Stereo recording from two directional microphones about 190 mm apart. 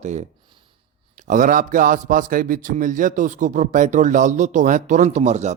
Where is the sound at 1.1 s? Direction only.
40° right (ahead or behind).